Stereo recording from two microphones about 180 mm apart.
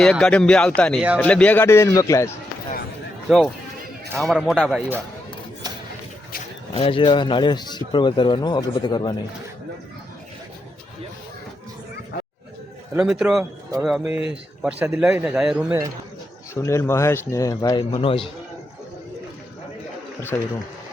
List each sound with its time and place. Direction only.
0.0 s speech: 5° left (ahead or behind)
3.2 s speech: centre (ahead or behind)
6.7 s a man's voice: 30° left (ahead or behind)
12.9 s speech: 5° right (ahead or behind)
16.6 s a man's voice: 15° left (ahead or behind); by 18.3 s 30° left (ahead or behind)
20.3 s speech: 15° left (ahead or behind)